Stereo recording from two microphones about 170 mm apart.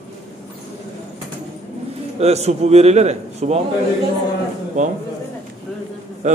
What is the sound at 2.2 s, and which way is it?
A man's voice, 40° right (ahead or behind).